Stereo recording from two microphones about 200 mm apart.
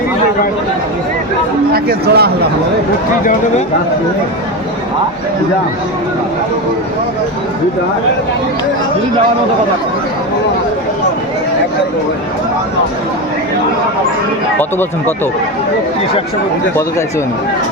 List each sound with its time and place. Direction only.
1.7 s a man's voice: 50° right (ahead or behind)
14.6 s speech: 10° left (ahead or behind)